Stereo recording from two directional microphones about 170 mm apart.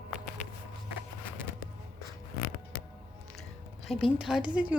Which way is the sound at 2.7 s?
55° left (ahead or behind).